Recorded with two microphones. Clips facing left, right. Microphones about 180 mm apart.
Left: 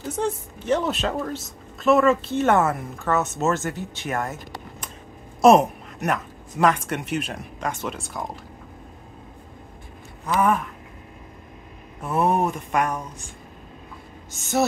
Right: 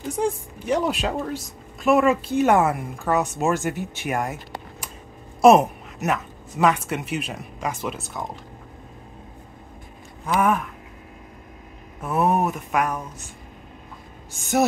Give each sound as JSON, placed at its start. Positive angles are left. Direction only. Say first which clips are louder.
{"t": 0.1, "sound": "a woman's voice", "louder": "right 2 dB", "side_deg": -10}
{"t": 10.2, "sound": "speech", "louder": "even", "side_deg": -10}
{"t": 12.0, "sound": "a sound", "louder": "even", "side_deg": -5}